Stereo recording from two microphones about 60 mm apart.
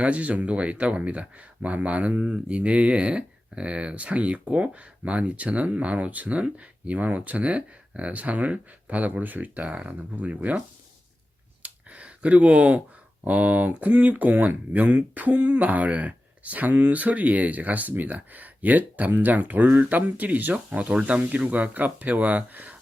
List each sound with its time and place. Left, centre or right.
0.0 s speech: right
11.6 s a sound: right
13.2 s speech: right
20.7 s speech: centre